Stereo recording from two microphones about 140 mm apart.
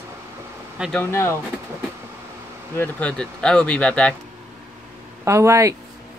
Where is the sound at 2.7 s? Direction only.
10° left (ahead or behind).